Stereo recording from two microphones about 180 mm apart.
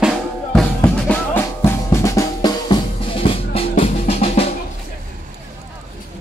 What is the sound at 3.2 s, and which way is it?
Music, 30° left (ahead or behind).